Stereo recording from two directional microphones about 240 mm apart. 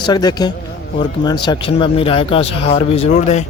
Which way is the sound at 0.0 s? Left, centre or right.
Centre.